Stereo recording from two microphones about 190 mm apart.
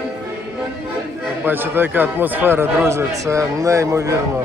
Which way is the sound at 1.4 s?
10° right (ahead or behind).